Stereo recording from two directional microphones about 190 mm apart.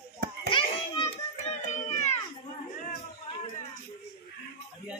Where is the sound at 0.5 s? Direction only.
25° left (ahead or behind).